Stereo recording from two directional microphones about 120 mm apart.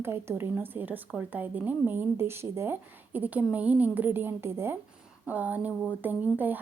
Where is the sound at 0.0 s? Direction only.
20° right (ahead or behind).